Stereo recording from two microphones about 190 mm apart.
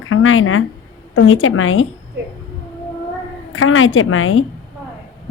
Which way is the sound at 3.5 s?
90° left.